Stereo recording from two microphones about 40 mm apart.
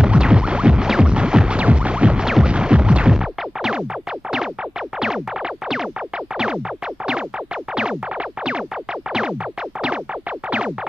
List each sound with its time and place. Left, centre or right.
0.0 s music: right
5.0 s music: centre
7.7 s music: right